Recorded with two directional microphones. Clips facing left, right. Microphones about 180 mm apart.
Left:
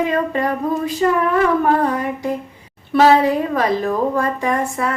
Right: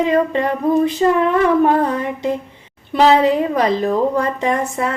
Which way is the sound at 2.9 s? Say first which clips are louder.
Even; 20° right (ahead or behind).